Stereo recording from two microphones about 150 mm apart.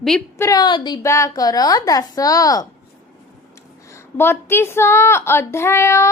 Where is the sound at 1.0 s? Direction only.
20° left (ahead or behind).